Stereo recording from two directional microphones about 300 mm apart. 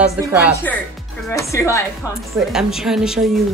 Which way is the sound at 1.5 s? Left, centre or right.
Centre.